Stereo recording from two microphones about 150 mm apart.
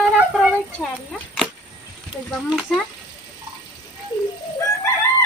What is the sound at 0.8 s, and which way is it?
Speech, centre (ahead or behind).